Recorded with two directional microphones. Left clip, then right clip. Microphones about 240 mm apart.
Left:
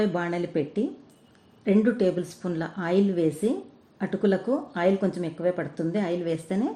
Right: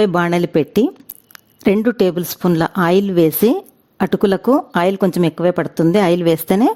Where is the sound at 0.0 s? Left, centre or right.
Right.